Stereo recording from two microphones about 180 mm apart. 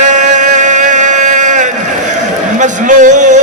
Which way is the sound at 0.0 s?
40° right (ahead or behind).